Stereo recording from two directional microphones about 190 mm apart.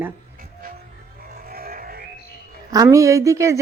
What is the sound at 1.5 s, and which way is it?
Frog, 50° right (ahead or behind).